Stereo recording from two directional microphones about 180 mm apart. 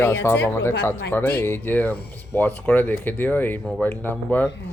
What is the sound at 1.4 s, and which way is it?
Speech, 10° left (ahead or behind).